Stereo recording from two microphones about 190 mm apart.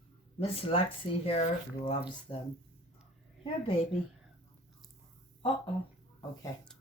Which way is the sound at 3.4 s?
30° left (ahead or behind).